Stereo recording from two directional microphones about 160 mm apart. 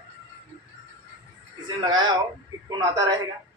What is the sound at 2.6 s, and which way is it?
Speech, 20° right (ahead or behind).